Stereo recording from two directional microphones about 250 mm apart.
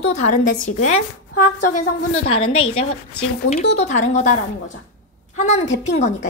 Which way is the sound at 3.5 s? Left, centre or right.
Left.